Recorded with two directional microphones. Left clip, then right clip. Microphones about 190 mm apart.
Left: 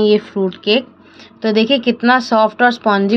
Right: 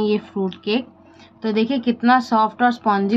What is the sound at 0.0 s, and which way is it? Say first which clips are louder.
A child's voice: left 8 dB; 20° left (ahead or behind).